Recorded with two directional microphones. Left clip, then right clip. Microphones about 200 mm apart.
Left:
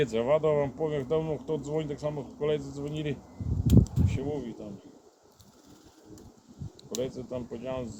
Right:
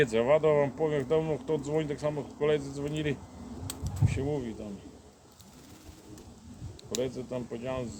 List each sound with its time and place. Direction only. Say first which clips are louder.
0.0 s speech: right 1 dB; 15° right (ahead or behind)
6.9 s speech: right 1 dB; 15° right (ahead or behind)